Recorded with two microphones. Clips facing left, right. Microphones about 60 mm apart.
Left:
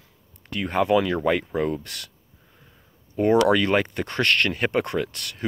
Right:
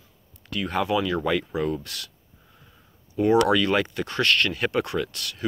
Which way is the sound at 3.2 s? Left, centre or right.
Left.